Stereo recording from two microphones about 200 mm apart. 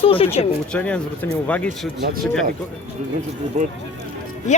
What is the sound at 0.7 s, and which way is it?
Speech, 5° left (ahead or behind).